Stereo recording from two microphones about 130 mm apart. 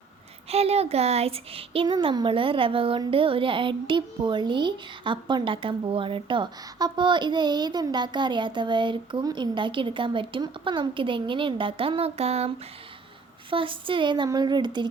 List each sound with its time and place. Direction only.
0.4 s speech: 50° right (ahead or behind)
13.5 s speech: 40° right (ahead or behind)